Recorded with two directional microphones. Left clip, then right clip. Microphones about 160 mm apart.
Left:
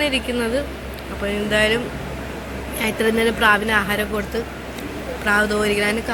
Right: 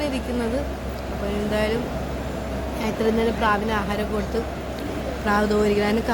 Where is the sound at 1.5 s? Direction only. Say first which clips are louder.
Left 7 dB; 10° left (ahead or behind).